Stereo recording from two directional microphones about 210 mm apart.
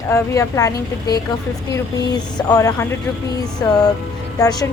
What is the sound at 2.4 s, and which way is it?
Speech, 15° left (ahead or behind).